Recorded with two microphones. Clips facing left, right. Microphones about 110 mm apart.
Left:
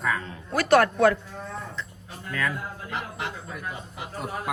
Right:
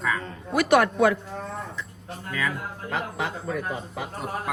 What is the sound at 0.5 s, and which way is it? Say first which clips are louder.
Speech: even; 15° right (ahead or behind).